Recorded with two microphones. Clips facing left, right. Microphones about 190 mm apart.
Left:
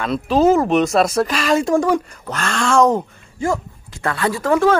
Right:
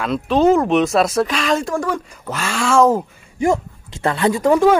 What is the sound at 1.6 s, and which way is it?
Speech, 20° left (ahead or behind).